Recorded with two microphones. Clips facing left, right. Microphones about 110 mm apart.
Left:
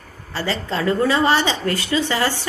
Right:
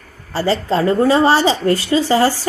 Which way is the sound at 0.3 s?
35° right (ahead or behind).